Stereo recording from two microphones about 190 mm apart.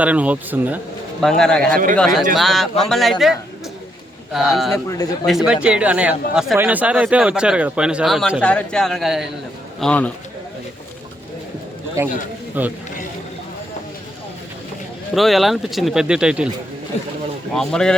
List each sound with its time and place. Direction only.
0.0 s speech: 5° right (ahead or behind)
1.2 s a man's voice: centre (ahead or behind)
12.0 s speech: 15° right (ahead or behind)
15.1 s speech: centre (ahead or behind)
17.5 s speech: 5° left (ahead or behind)